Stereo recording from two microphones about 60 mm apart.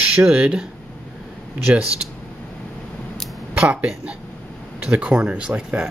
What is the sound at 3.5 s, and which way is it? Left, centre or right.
Speech, centre.